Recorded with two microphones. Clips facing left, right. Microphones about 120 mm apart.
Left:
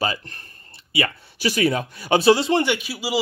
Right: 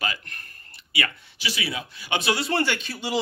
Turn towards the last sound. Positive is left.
turn(degrees=5)  # may be behind; listen again after turning